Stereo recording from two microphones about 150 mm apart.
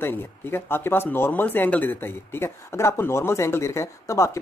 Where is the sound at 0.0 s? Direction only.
15° left (ahead or behind).